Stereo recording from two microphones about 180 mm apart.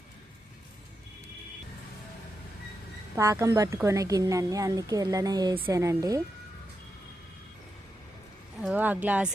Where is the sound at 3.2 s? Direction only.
15° right (ahead or behind).